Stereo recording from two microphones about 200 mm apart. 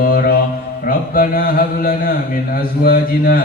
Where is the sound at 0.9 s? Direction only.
45° left (ahead or behind).